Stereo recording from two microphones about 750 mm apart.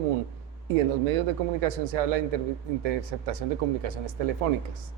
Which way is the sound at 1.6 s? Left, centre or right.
Right.